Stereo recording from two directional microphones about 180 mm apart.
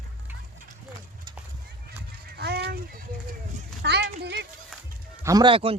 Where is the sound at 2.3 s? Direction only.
65° right (ahead or behind).